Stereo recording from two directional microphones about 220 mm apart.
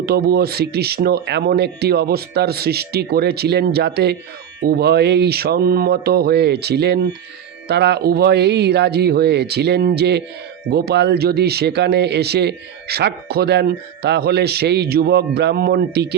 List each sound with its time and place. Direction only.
0.0 s speech: 45° right (ahead or behind)